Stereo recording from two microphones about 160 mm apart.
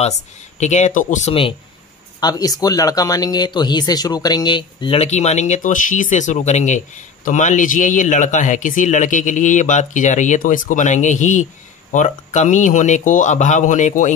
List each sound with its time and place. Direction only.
0.6 s speech: 45° left (ahead or behind)
2.1 s speech: 25° left (ahead or behind); by 14.1 s 50° left (ahead or behind)